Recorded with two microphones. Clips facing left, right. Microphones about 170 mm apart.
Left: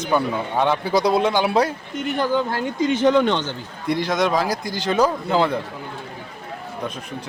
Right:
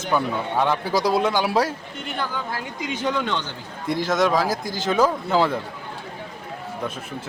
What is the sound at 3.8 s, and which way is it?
Speech, centre (ahead or behind).